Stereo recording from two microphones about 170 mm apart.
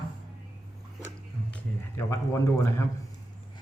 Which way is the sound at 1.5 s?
15° left (ahead or behind).